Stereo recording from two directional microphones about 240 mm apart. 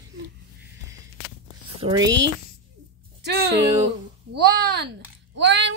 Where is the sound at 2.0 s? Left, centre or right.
Right.